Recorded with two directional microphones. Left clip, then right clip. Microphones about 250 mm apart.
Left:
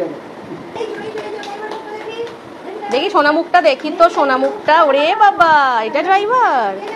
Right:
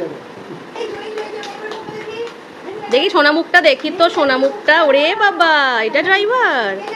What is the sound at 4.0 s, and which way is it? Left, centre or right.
A woman's voice, right.